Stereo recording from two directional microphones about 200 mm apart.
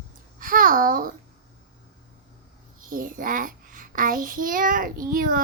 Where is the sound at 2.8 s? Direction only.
45° right (ahead or behind).